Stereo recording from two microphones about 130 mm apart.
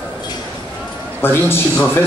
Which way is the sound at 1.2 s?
15° left (ahead or behind).